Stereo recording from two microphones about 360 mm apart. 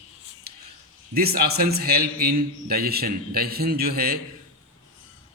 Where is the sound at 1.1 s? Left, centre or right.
Right.